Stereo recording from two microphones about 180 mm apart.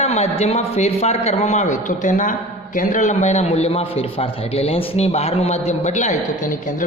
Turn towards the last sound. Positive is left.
turn(degrees=45)  # may be behind; listen again after turning